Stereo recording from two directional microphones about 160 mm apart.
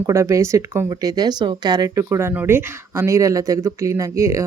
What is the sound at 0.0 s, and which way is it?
Speech, 20° right (ahead or behind).